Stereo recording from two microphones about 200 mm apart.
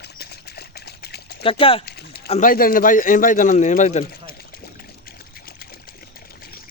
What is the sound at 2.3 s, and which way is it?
A man's voice, 45° left (ahead or behind).